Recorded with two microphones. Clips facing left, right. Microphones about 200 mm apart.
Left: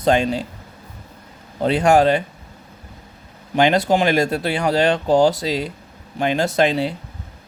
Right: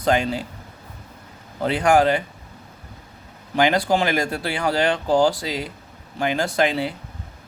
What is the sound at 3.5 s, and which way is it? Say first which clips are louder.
Speech: left 3 dB; 25° left (ahead or behind).